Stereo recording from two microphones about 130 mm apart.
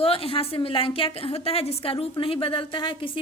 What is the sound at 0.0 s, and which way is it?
A woman's voice, 45° left (ahead or behind).